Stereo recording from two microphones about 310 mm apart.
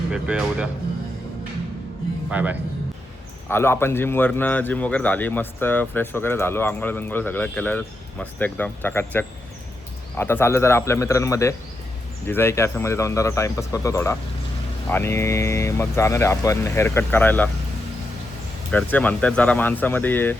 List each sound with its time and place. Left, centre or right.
0.1 s speech: centre
2.3 s speech: centre
3.5 s speech: centre
18.7 s speech: centre